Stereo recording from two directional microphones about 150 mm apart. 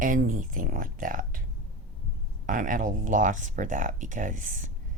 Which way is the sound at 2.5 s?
65° right (ahead or behind).